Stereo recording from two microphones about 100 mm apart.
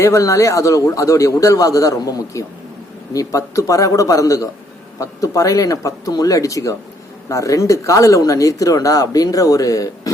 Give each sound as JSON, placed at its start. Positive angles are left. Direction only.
{"t": 0.0, "sound": "speech", "side_deg": 30}